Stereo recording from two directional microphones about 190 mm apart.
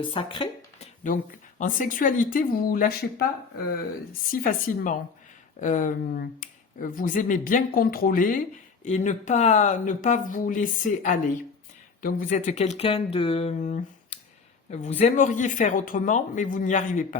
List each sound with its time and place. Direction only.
0.0 s speech: 30° left (ahead or behind)
1.0 s speech: 45° left (ahead or behind)
4.3 s speech: 45° left (ahead or behind)